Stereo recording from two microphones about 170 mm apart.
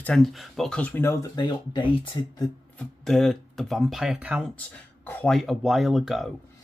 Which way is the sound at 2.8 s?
Centre (ahead or behind).